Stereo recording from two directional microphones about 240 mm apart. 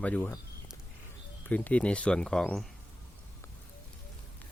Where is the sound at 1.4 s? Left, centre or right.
Centre.